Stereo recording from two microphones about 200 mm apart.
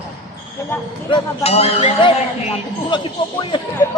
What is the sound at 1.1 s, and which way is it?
Speech, 30° left (ahead or behind).